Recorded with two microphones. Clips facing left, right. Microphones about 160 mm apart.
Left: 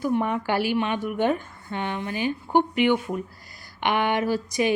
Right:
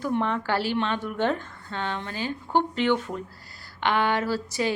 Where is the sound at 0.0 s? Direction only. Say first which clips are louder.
Left 2 dB; 10° left (ahead or behind).